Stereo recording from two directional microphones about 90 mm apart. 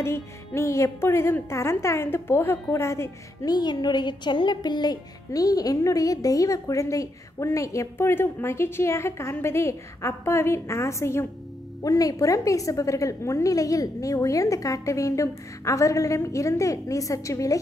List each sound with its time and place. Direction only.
0.0 s a woman's voice: 30° left (ahead or behind)
3.4 s a woman's voice: 50° left (ahead or behind)